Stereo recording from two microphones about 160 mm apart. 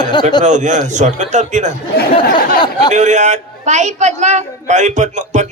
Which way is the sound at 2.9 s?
50° right (ahead or behind).